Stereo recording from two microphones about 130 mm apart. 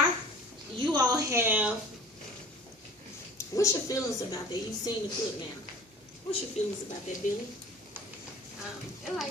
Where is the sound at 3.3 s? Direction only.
25° left (ahead or behind).